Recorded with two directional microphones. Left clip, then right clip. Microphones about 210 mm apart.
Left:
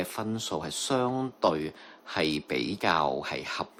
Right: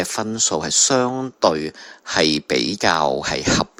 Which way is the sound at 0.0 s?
30° right (ahead or behind).